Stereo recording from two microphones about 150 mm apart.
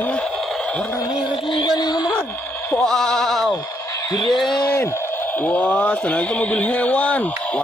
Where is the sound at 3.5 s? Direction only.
25° left (ahead or behind).